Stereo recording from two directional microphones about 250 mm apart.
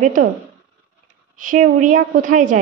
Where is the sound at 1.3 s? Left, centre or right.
Right.